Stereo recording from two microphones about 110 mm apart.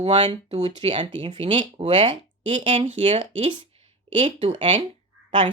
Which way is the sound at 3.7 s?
60° right (ahead or behind).